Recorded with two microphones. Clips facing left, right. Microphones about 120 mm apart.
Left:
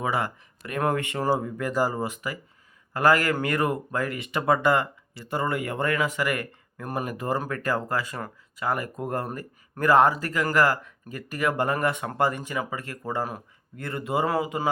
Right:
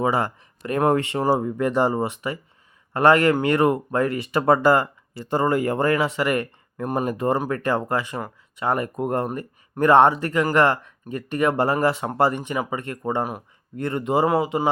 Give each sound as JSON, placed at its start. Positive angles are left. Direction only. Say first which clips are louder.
{"t": 0.0, "sound": "speech", "louder": "right 5 dB", "side_deg": -30}